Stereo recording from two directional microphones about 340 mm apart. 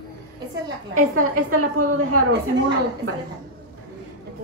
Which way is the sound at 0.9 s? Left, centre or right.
Right.